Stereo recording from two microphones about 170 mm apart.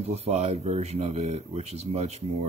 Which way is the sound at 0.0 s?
40° right (ahead or behind).